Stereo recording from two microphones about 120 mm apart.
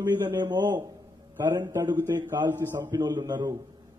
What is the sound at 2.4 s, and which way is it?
Speech, 15° right (ahead or behind).